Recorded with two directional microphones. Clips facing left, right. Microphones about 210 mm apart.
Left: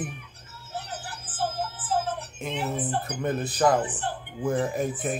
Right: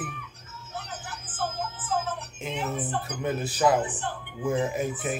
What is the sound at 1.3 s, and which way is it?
Music, 35° left (ahead or behind).